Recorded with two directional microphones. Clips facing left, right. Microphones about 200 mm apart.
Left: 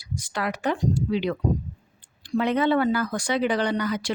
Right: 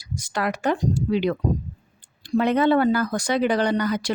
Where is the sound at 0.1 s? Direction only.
45° right (ahead or behind).